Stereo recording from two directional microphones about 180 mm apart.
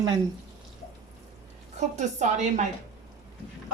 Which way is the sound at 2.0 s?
40° right (ahead or behind).